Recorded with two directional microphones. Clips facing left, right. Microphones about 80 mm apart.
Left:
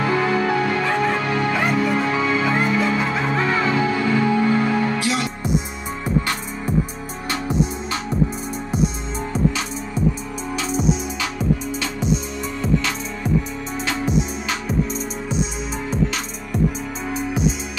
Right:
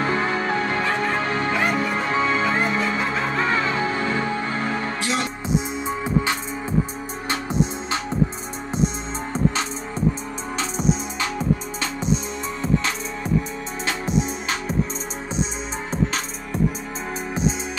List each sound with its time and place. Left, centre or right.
0.0 s music: right
5.9 s music: right
11.1 s music: right
13.8 s music: right